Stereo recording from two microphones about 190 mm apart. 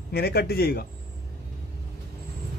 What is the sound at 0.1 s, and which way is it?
Speech, 55° left (ahead or behind).